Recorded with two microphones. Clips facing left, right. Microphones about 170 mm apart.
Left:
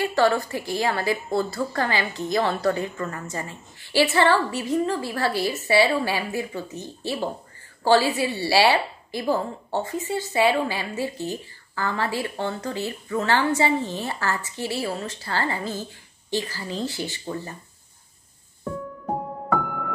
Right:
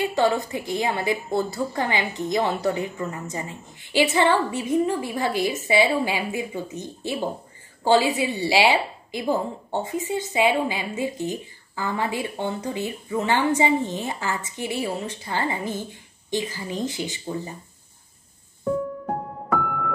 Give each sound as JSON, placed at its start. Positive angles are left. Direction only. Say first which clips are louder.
{"t": 0.0, "sound": "a woman's voice", "louder": "left 1 dB", "side_deg": -20}